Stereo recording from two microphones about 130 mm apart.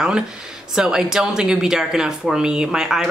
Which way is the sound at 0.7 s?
5° right (ahead or behind).